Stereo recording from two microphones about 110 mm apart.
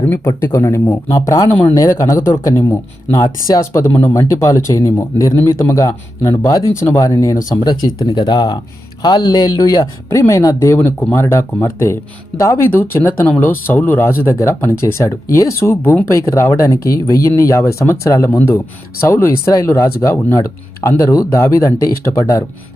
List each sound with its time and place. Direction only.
0.1 s speech: 25° left (ahead or behind)
10.8 s speech: 15° left (ahead or behind)